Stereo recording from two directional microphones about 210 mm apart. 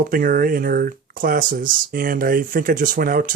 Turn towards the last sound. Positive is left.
turn(degrees=-40)  # may be behind; listen again after turning